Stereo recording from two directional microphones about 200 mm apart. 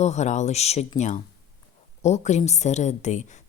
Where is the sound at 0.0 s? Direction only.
35° left (ahead or behind).